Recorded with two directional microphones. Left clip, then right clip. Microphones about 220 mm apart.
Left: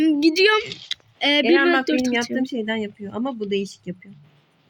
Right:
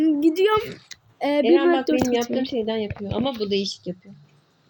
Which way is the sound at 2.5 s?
30° left (ahead or behind).